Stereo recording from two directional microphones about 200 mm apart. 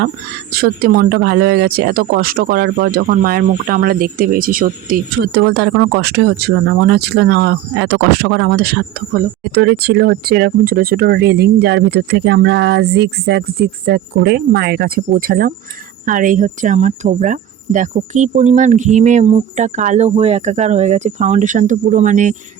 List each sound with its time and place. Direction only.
0.5 s speech: 50° right (ahead or behind)